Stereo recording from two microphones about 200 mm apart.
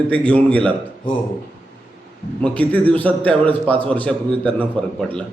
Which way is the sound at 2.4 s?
5° left (ahead or behind).